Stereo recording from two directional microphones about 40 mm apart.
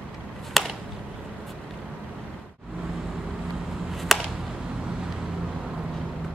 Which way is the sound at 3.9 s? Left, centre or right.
Centre.